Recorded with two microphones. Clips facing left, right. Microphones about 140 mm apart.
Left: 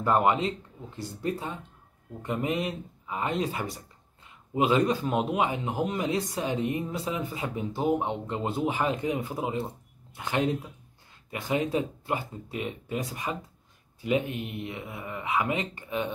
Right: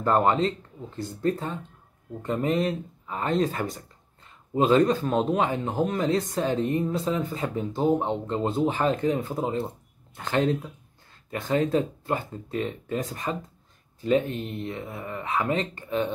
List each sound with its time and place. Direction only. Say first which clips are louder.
0.0 s speech: right 2 dB; 10° left (ahead or behind)
4.7 s speech: right 4 dB; 10° left (ahead or behind)
14.8 s speech: right 3 dB; 35° right (ahead or behind)
15.2 s speech: right 2 dB; 10° left (ahead or behind)